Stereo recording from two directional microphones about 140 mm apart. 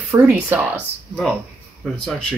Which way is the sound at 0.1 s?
15° right (ahead or behind).